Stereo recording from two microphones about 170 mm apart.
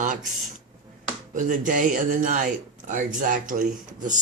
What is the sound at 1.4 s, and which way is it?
Speech, 50° right (ahead or behind).